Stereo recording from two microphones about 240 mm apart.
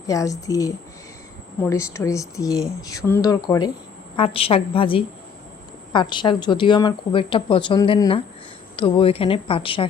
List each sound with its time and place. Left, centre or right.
0.1 s speech: centre